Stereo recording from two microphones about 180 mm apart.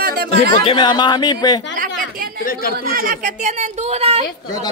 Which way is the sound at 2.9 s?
55° right (ahead or behind).